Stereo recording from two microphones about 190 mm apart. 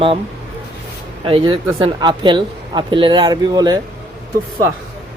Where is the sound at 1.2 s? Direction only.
25° right (ahead or behind).